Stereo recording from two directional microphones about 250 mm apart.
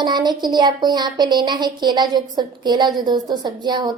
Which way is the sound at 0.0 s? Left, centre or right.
Centre.